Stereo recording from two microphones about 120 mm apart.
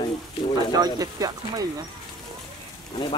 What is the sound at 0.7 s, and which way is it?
Speech, 35° right (ahead or behind).